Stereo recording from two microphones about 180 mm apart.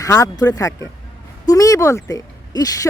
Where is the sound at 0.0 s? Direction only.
20° left (ahead or behind).